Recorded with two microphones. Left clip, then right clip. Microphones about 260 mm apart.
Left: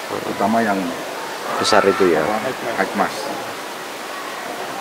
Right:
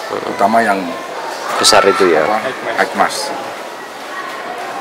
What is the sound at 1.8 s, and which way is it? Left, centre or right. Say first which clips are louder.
Speech: right 3 dB; centre.